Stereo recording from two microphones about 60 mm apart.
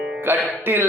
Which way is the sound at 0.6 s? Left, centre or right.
Right.